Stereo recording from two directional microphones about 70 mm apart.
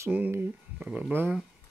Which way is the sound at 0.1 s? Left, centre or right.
Right.